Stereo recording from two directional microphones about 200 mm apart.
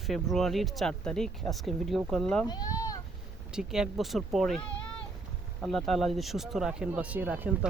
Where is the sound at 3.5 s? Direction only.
5° right (ahead or behind).